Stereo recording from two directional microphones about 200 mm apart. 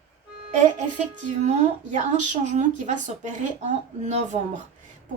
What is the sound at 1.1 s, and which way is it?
Speech, 35° right (ahead or behind).